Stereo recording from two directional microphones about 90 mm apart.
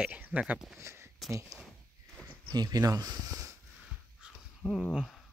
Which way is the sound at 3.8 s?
5° right (ahead or behind).